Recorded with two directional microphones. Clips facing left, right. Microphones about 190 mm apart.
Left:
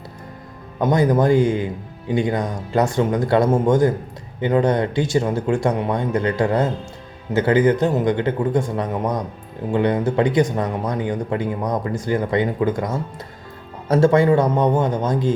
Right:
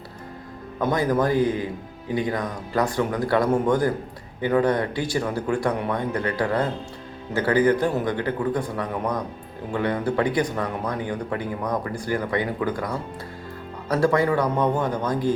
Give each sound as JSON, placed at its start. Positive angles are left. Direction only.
{"t": 0.8, "sound": "speech", "side_deg": 20}